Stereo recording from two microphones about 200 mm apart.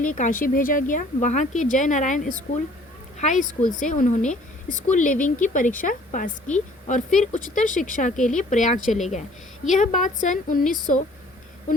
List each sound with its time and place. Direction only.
0.0 s speech: 40° left (ahead or behind)